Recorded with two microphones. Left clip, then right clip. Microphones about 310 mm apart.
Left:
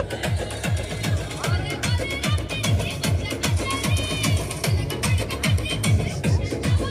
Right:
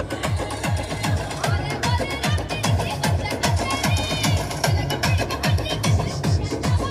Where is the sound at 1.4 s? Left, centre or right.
Right.